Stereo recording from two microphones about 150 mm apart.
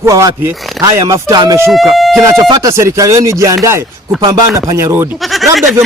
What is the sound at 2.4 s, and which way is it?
Speech, 25° right (ahead or behind).